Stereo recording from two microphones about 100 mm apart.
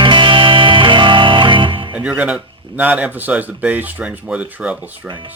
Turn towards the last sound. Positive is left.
turn(degrees=-15)  # may be behind; listen again after turning